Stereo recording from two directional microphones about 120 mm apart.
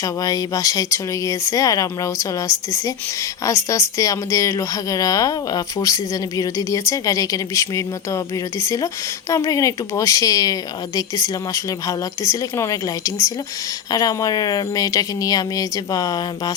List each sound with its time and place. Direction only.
0.0 s speech: 30° left (ahead or behind)